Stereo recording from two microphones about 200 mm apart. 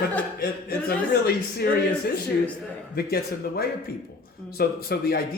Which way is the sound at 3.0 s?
50° left (ahead or behind).